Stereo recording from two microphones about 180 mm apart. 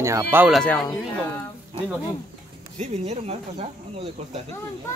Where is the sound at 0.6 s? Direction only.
5° left (ahead or behind).